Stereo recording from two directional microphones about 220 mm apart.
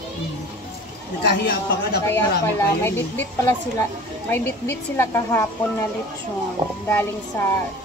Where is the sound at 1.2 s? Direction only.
45° left (ahead or behind).